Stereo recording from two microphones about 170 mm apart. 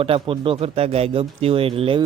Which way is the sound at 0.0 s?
30° right (ahead or behind).